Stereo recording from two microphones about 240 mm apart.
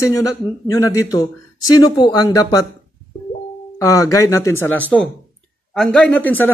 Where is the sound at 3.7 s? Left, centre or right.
Centre.